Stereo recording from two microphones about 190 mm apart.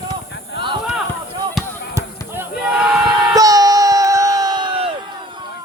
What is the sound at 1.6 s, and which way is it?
Basketball bounce, centre (ahead or behind).